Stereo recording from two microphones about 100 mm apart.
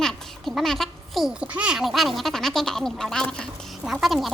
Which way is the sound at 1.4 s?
10° right (ahead or behind).